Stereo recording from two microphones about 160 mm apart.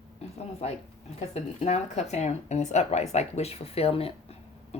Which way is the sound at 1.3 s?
45° left (ahead or behind).